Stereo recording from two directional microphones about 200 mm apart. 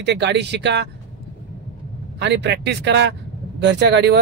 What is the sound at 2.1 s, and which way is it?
Speech, 60° right (ahead or behind).